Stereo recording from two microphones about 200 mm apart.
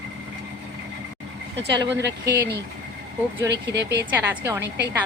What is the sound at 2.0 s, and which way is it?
Speech, 60° right (ahead or behind).